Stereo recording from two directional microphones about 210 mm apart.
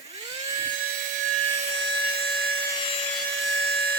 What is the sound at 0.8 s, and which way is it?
Wood, 40° right (ahead or behind).